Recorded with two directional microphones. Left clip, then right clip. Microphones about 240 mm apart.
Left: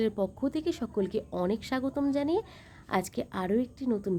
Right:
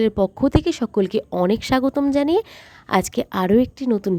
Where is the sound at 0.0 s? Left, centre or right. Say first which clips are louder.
Right 11 dB; right.